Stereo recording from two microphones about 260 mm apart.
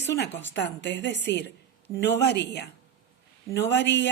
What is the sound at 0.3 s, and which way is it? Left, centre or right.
A woman's voice, left.